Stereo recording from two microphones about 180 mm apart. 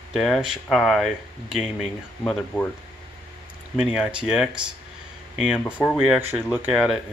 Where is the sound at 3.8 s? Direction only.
5° right (ahead or behind).